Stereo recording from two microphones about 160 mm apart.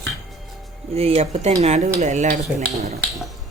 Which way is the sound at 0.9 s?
40° right (ahead or behind).